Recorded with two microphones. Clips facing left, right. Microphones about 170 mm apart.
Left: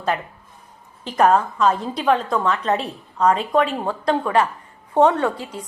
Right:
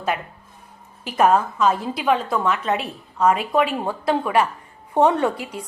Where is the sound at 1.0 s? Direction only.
5° right (ahead or behind).